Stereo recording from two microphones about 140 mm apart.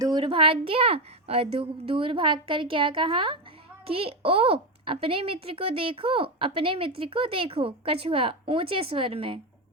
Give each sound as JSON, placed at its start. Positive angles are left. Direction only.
{"t": 0.0, "sound": "speech", "side_deg": -30}